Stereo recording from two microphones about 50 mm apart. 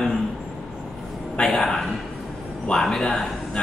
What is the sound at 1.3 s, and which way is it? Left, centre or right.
A man's voice, centre.